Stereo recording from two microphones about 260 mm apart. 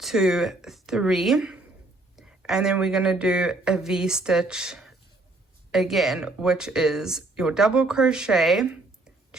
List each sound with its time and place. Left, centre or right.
0.0 s speech: centre